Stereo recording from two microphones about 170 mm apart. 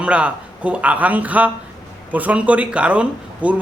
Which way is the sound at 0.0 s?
5° right (ahead or behind).